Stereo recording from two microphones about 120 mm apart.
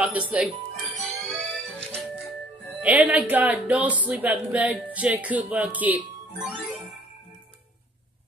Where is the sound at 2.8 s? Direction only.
15° right (ahead or behind).